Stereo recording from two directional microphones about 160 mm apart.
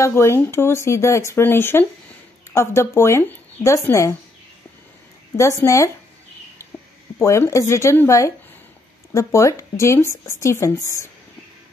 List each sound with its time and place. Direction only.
0.0 s speech: 15° left (ahead or behind)
5.4 s speech: 20° left (ahead or behind)
6.6 s a sound: 15° left (ahead or behind)
7.2 s speech: 15° left (ahead or behind)